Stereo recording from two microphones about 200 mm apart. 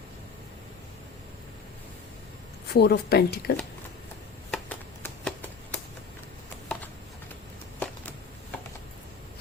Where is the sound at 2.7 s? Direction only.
55° left (ahead or behind).